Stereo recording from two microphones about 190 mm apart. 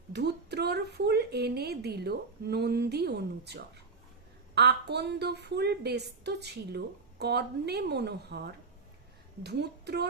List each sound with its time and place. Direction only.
0.1 s a woman's voice: 60° right (ahead or behind)